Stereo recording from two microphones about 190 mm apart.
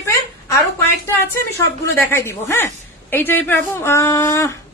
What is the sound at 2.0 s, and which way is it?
A woman's voice, 10° left (ahead or behind).